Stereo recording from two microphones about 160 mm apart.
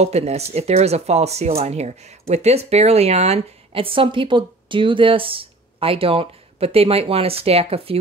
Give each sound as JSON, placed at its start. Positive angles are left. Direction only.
{"t": 0.0, "sound": "speech", "side_deg": -40}